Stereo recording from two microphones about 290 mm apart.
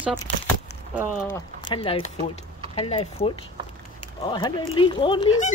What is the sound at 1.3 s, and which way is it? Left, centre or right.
Speech, centre.